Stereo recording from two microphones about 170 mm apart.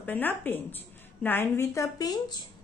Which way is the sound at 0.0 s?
10° left (ahead or behind).